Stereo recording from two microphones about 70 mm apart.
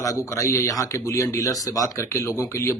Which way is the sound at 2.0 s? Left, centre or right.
Left.